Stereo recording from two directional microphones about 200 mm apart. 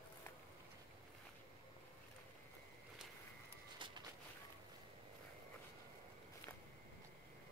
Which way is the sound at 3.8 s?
25° right (ahead or behind).